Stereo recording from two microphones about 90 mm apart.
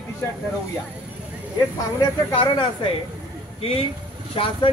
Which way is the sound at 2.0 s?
50° left (ahead or behind).